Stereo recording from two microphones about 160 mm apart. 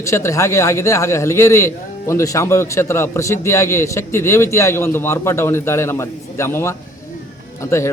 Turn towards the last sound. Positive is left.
turn(degrees=15)  # may be behind; listen again after turning